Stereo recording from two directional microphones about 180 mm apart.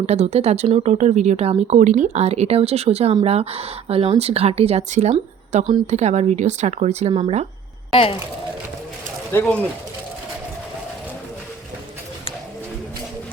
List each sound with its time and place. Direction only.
0.0 s speech: 35° right (ahead or behind)
7.9 s speech: 30° left (ahead or behind)
9.3 s speech: 10° left (ahead or behind)